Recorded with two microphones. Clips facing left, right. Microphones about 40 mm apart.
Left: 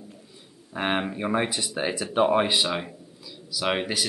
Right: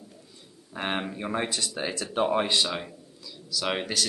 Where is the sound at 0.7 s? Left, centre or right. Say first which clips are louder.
Left 4 dB; centre.